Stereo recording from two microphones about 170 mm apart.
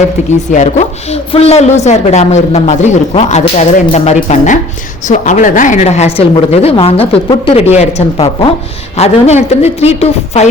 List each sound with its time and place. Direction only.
0.5 s speech: 45° left (ahead or behind)